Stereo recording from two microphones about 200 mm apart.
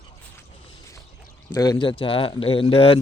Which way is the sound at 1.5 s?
15° left (ahead or behind).